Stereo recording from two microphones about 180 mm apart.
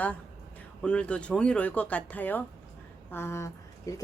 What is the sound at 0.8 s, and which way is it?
Speech, 5° left (ahead or behind).